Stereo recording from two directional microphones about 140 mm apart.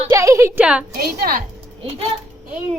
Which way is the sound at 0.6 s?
10° right (ahead or behind).